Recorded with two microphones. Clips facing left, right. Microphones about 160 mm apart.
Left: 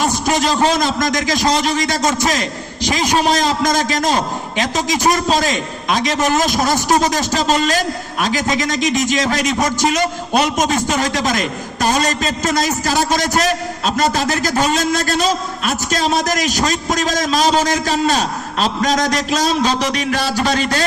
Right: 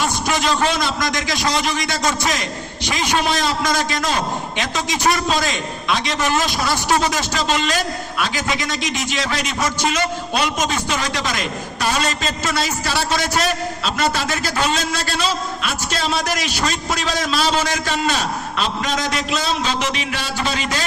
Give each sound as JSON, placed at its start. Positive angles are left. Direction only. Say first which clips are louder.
{"t": 0.0, "sound": "a man's voice", "louder": "left 4 dB", "side_deg": 40}
{"t": 2.8, "sound": "a man's voice", "louder": "left 4 dB", "side_deg": 40}